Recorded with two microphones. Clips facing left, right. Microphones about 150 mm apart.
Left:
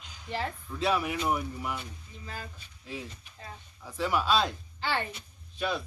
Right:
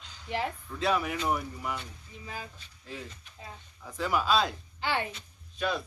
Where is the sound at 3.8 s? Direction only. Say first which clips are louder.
Even; centre (ahead or behind).